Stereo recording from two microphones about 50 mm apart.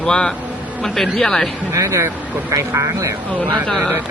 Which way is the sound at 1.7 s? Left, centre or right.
Right.